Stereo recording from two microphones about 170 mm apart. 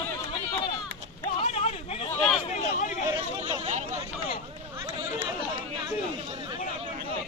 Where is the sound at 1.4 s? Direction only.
40° left (ahead or behind).